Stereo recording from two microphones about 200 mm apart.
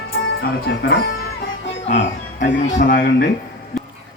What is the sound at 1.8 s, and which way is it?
Speech, 35° left (ahead or behind).